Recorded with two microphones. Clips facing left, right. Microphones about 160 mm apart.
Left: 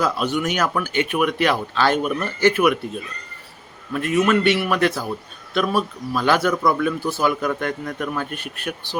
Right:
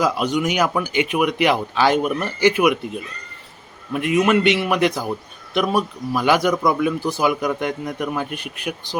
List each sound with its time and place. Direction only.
0.0 s speech: 15° right (ahead or behind)